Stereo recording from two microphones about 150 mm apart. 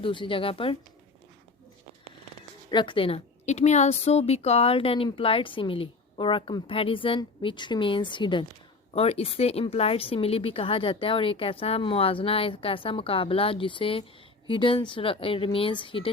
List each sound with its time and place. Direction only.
0.0 s a woman's voice: 35° left (ahead or behind)
2.6 s a woman's voice: 30° left (ahead or behind)